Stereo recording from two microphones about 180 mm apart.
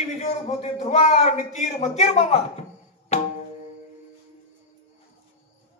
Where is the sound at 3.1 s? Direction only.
40° left (ahead or behind).